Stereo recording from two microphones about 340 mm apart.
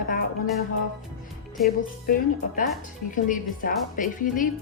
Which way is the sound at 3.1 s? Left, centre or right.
Left.